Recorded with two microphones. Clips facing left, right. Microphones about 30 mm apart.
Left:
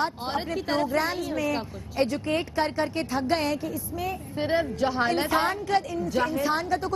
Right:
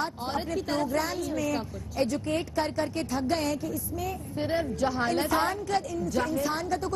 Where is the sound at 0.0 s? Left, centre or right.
Left.